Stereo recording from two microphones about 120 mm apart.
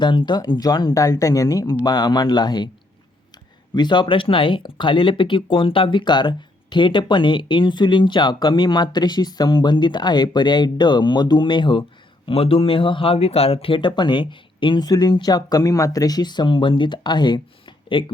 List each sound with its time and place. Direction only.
0.0 s speech: 40° left (ahead or behind)
3.8 s speech: 40° left (ahead or behind)